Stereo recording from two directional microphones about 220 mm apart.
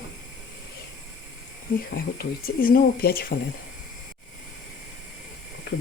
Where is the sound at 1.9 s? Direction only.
40° left (ahead or behind).